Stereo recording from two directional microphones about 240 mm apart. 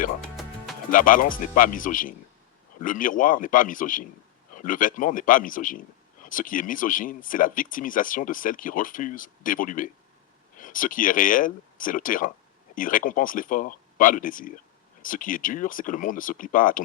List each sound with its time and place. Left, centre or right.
0.9 s speech: left